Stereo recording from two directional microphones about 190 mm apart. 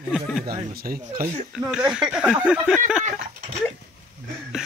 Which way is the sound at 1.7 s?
5° right (ahead or behind).